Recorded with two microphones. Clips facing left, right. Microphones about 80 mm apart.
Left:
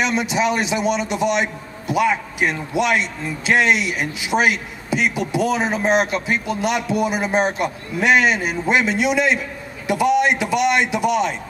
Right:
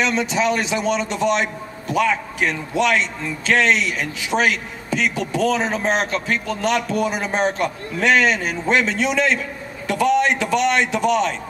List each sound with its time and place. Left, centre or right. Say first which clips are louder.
0.0 s a man's voice: even; centre